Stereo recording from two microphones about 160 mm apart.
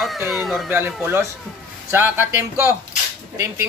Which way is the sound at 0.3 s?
5° right (ahead or behind).